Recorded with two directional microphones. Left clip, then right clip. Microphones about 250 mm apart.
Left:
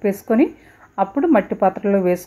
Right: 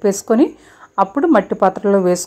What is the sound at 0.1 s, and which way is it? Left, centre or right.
A woman's voice, centre.